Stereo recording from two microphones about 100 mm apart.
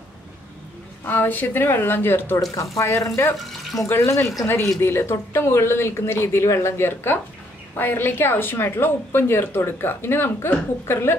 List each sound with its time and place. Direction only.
1.0 s speech: 20° left (ahead or behind)
2.5 s speech: 30° left (ahead or behind)
3.3 s speech: centre (ahead or behind)
3.8 s speech: 30° left (ahead or behind)